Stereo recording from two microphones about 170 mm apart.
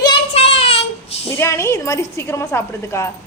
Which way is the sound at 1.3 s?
15° left (ahead or behind).